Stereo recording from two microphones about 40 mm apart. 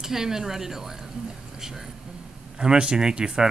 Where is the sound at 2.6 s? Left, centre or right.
Right.